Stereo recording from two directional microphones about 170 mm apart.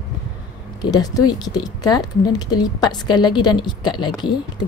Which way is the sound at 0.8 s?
25° left (ahead or behind).